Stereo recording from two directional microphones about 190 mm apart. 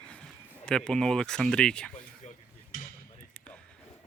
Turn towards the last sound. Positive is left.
turn(degrees=5)  # may be behind; listen again after turning